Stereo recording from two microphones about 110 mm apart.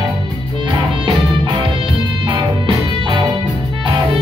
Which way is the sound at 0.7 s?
45° right (ahead or behind).